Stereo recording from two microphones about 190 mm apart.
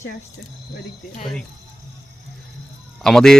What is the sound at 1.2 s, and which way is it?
Speech, centre (ahead or behind).